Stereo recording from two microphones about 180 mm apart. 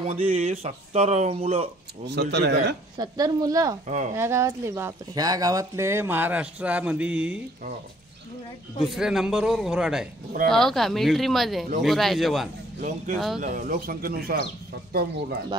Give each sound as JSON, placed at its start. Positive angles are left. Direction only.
{"t": 0.0, "sound": "speech", "side_deg": -35}
{"t": 2.0, "sound": "a man's voice", "side_deg": -70}
{"t": 3.0, "sound": "speech", "side_deg": -20}
{"t": 3.8, "sound": "speech", "side_deg": -45}
{"t": 4.1, "sound": "speech", "side_deg": -15}
{"t": 8.7, "sound": "speech", "side_deg": 0}
{"t": 12.8, "sound": "speech", "side_deg": -45}